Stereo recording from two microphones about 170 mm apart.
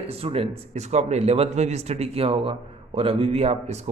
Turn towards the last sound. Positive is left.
turn(degrees=-40)  # may be behind; listen again after turning